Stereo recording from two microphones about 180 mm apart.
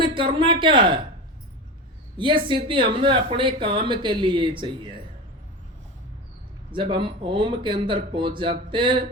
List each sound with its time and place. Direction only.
0.0 s speech: 30° right (ahead or behind)
2.1 s speech: 25° right (ahead or behind)
6.7 s speech: 30° right (ahead or behind)